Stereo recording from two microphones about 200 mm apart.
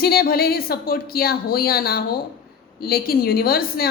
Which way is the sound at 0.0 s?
50° left (ahead or behind).